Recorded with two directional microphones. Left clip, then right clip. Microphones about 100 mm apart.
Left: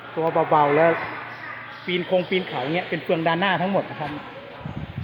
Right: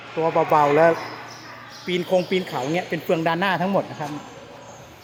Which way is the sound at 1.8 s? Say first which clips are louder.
Right 1 dB; 35° right (ahead or behind).